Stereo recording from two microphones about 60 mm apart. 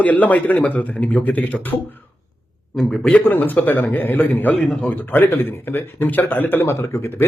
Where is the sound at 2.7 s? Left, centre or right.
Centre.